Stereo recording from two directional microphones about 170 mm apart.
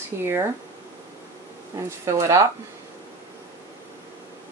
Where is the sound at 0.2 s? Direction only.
15° right (ahead or behind).